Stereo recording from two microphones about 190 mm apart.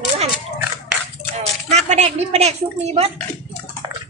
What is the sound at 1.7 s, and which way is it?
A woman's voice, 35° right (ahead or behind).